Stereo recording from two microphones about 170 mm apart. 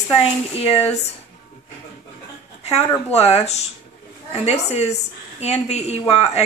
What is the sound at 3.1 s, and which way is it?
A woman's voice, 40° left (ahead or behind).